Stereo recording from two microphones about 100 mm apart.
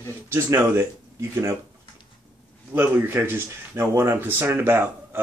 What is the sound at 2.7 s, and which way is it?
Speech, 20° right (ahead or behind).